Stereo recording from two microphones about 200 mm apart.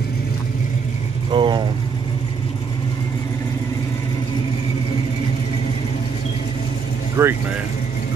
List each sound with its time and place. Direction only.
1.3 s speech: 25° right (ahead or behind)
7.2 s vehicle: 10° right (ahead or behind)